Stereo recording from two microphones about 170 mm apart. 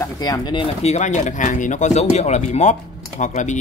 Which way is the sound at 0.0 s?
20° left (ahead or behind).